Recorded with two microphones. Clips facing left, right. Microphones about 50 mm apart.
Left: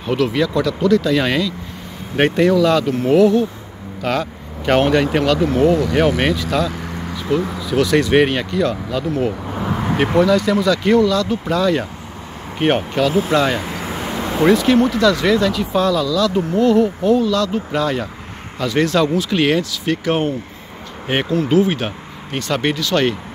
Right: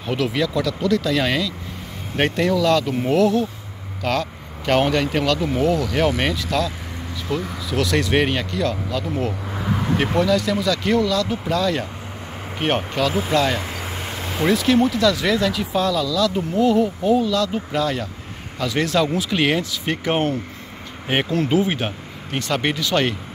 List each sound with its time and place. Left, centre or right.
0.0 s speech: centre
7.7 s speech: centre
13.6 s vehicle: centre
13.9 s a sound: centre
14.5 s speech: centre
19.6 s speech: centre
21.1 s speech: centre